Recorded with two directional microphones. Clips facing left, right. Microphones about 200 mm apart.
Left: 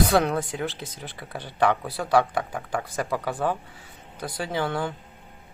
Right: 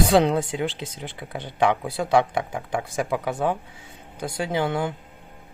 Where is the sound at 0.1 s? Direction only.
25° right (ahead or behind).